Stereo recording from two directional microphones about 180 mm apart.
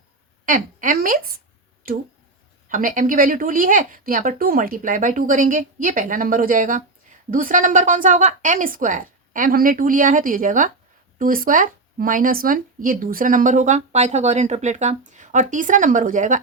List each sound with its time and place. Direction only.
0.4 s speech: 50° right (ahead or behind)